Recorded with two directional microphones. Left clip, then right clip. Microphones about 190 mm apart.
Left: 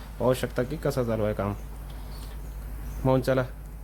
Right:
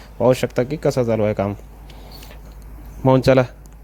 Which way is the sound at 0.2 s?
30° right (ahead or behind).